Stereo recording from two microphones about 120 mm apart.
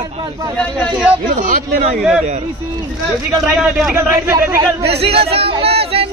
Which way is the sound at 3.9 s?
20° right (ahead or behind).